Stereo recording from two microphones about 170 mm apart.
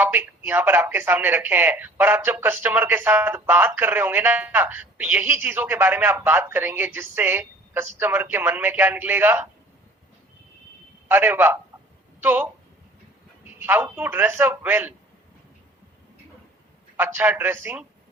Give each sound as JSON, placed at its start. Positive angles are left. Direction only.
{"t": 0.0, "sound": "speech", "side_deg": -10}
{"t": 11.1, "sound": "speech", "side_deg": -10}
{"t": 17.0, "sound": "speech", "side_deg": -10}